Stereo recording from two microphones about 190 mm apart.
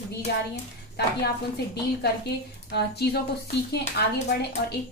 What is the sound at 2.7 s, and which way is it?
Speech, 60° left (ahead or behind).